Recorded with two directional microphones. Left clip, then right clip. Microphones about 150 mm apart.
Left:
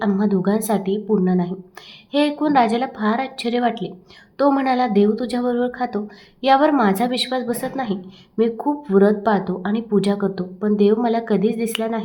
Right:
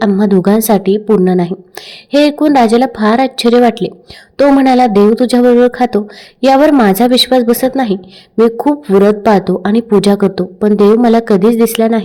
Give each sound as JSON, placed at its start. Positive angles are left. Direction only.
{"t": 0.2, "sound": "speech", "side_deg": -50}